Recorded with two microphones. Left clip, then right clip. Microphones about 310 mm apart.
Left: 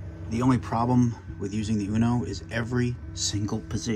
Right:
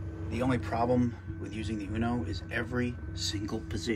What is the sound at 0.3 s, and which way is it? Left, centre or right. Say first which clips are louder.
Speech: left 5 dB; left.